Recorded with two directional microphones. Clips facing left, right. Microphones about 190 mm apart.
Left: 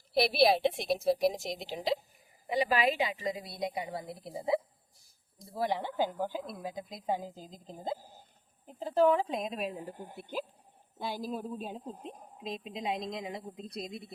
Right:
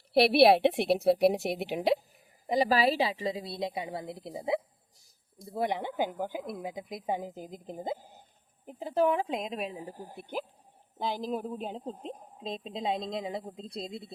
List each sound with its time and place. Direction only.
0.1 s a woman's voice: 65° right (ahead or behind)
2.5 s speech: 35° right (ahead or behind); by 4.5 s 20° right (ahead or behind)
5.5 s a woman's voice: 20° right (ahead or behind)
9.9 s speech: 35° right (ahead or behind)
11.3 s a woman's voice: 60° right (ahead or behind)
11.5 s speech: 20° right (ahead or behind)